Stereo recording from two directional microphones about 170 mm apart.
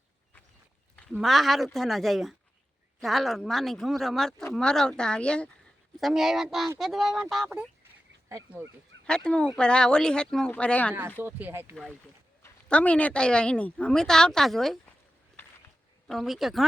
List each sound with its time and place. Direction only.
1.1 s a woman's voice: centre (ahead or behind)
8.3 s speech: 20° right (ahead or behind)
9.0 s a woman's voice: 5° left (ahead or behind)
11.2 s speech: 10° right (ahead or behind)
12.6 s a woman's voice: 5° left (ahead or behind)
16.0 s a woman's voice: centre (ahead or behind)